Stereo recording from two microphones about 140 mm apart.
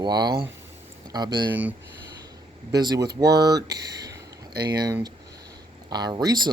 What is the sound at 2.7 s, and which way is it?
Speech, 30° right (ahead or behind).